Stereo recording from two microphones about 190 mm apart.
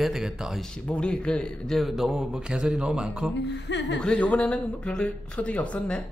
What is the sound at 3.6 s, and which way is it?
Speech, 65° left (ahead or behind).